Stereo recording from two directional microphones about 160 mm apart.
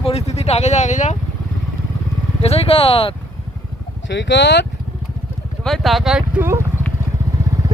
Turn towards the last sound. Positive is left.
turn(degrees=-15)  # may be behind; listen again after turning